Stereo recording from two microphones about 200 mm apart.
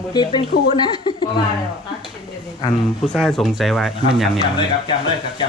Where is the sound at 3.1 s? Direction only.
Centre (ahead or behind).